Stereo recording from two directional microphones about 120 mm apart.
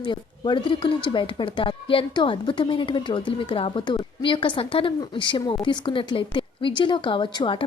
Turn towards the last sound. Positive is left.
turn(degrees=40)  # may be behind; listen again after turning